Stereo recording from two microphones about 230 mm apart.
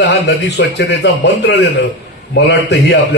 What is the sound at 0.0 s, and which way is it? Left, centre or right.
A man's voice, left.